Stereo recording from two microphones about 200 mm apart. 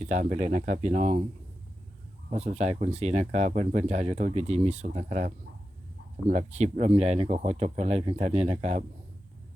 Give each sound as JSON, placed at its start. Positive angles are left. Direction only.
{"t": 0.0, "sound": "speech", "side_deg": -35}
{"t": 2.3, "sound": "speech", "side_deg": -30}